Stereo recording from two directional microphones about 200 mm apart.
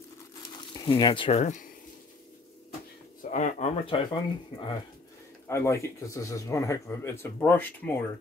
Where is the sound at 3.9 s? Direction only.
25° left (ahead or behind).